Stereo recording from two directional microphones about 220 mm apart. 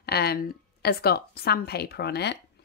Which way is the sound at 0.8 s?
45° left (ahead or behind).